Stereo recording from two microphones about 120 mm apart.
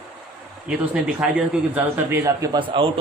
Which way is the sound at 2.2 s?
30° right (ahead or behind).